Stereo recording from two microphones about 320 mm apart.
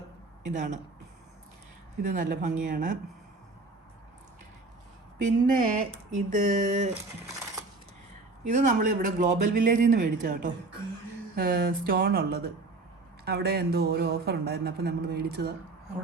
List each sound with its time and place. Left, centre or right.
0.4 s speech: right
2.0 s speech: right
5.2 s speech: right
8.4 s speech: right